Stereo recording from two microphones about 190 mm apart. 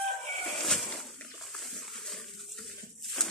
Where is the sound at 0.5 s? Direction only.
Centre (ahead or behind).